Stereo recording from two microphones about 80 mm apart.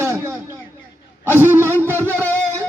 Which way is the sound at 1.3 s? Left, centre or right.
Right.